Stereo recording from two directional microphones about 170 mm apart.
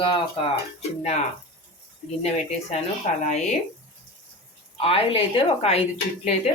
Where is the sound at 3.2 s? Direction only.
40° left (ahead or behind).